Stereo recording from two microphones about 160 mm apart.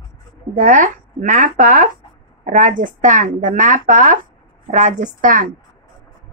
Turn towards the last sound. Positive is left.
turn(degrees=-55)  # may be behind; listen again after turning